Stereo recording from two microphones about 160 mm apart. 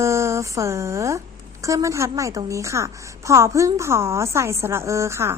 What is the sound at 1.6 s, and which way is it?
A woman's voice, 20° right (ahead or behind).